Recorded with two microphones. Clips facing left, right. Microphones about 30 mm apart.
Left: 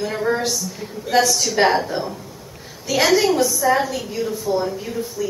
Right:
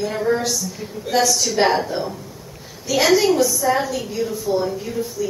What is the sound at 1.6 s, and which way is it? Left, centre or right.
Speech, centre.